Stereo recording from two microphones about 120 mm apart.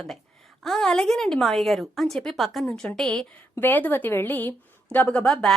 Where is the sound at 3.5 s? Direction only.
15° left (ahead or behind).